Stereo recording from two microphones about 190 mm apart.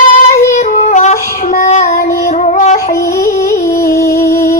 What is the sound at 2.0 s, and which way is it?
Female singing, 50° left (ahead or behind).